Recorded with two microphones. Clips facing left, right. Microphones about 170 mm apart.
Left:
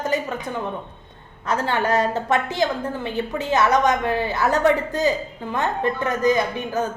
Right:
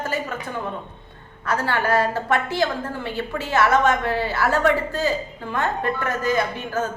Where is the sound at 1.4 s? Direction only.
20° left (ahead or behind).